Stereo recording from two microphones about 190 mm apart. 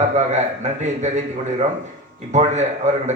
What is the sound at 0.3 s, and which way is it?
A man's voice, 40° right (ahead or behind).